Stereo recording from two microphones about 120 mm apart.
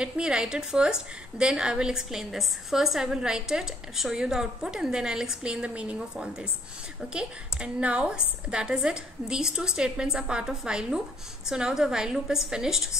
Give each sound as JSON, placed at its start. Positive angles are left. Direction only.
{"t": 0.0, "sound": "a woman's voice", "side_deg": -5}